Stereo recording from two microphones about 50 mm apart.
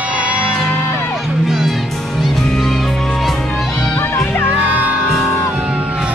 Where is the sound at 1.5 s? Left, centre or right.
Centre.